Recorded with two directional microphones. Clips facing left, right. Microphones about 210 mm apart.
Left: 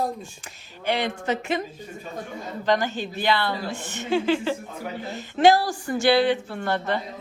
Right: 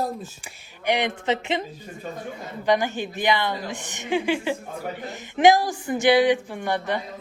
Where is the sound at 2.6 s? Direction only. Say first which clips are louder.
Right 1 dB; 15° right (ahead or behind).